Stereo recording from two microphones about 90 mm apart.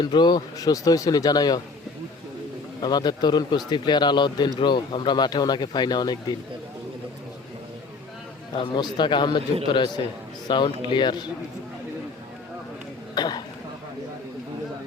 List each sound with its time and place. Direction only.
0.0 s speech: 55° left (ahead or behind)
2.8 s speech: 55° left (ahead or behind)
8.6 s speech: 55° left (ahead or behind)
13.1 s throat clearing: 50° left (ahead or behind)